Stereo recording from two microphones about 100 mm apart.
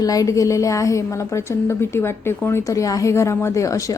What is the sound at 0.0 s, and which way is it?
A woman's voice, 35° left (ahead or behind).